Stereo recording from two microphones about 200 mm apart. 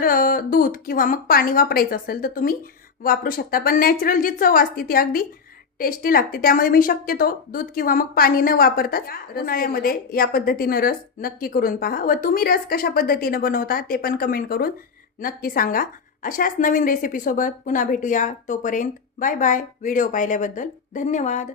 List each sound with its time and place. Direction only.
0.0 s a woman's voice: 45° left (ahead or behind)